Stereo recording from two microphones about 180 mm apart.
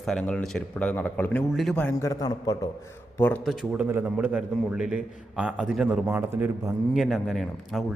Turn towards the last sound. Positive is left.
turn(degrees=0)  # may be behind; listen again after turning